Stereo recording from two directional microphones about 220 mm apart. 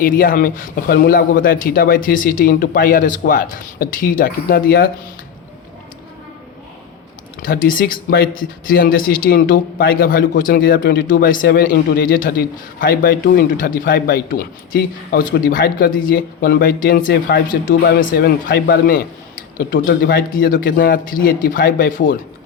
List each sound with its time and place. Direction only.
0.0 s a man's voice: 40° left (ahead or behind)
7.4 s a man's voice: 40° left (ahead or behind)